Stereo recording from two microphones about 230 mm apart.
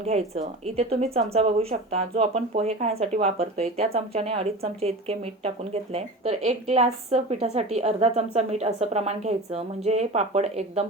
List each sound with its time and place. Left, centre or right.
0.0 s speech: right